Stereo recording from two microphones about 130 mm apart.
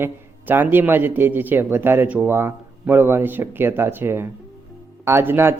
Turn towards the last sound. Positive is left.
turn(degrees=-20)  # may be behind; listen again after turning